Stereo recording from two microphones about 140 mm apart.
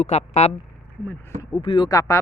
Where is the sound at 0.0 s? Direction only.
50° left (ahead or behind).